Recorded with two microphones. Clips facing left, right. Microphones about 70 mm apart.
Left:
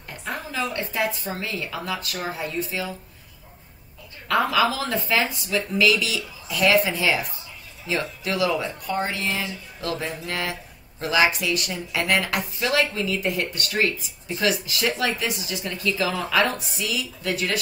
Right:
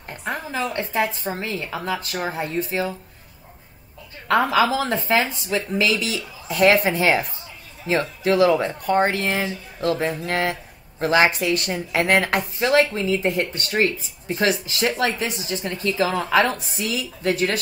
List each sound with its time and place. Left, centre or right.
0.1 s speech: right
4.3 s speech: right